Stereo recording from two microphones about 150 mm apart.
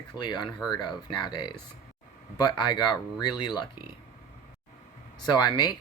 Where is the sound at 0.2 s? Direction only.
30° left (ahead or behind).